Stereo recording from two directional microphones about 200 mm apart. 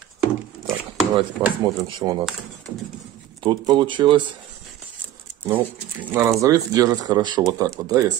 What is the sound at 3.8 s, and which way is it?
Speech, 25° right (ahead or behind).